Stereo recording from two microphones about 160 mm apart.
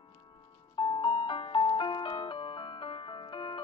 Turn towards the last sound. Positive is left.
turn(degrees=30)  # may be behind; listen again after turning